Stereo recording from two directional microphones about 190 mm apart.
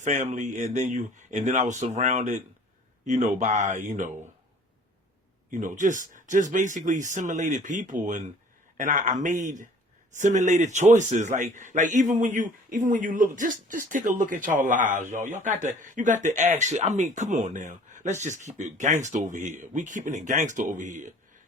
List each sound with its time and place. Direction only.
0.0 s speech: 40° right (ahead or behind)
5.5 s a man's voice: 40° right (ahead or behind)